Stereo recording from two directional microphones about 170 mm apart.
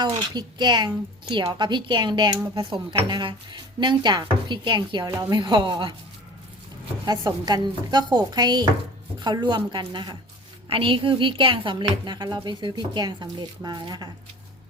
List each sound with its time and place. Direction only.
0.0 s speech: 25° right (ahead or behind)
5.1 s speech: 15° right (ahead or behind)
5.4 s speech: 25° right (ahead or behind)
7.0 s speech: 25° right (ahead or behind)